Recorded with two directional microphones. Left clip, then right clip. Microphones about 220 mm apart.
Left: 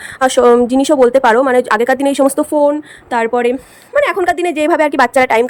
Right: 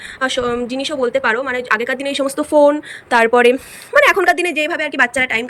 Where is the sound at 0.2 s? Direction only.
20° left (ahead or behind).